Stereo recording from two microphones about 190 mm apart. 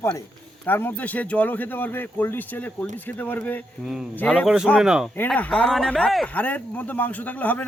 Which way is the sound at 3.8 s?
5° right (ahead or behind).